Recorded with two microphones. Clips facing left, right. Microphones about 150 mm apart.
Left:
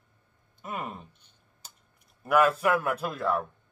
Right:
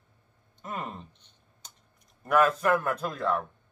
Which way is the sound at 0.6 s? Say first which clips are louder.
Even; 10° left (ahead or behind).